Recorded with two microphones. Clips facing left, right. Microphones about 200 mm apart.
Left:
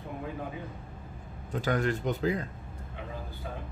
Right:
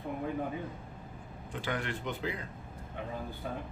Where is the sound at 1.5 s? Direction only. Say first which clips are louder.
Left 7 dB; 40° left (ahead or behind).